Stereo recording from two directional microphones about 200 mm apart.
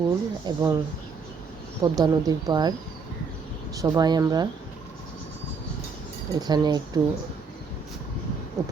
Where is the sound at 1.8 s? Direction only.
20° right (ahead or behind).